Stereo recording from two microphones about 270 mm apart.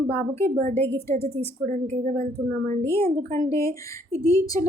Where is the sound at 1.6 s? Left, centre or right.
Right.